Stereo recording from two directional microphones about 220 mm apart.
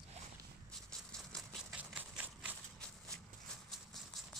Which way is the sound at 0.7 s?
5° left (ahead or behind).